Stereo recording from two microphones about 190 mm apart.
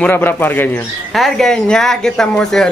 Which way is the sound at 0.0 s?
10° left (ahead or behind).